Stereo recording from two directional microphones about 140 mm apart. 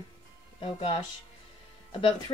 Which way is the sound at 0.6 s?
40° left (ahead or behind).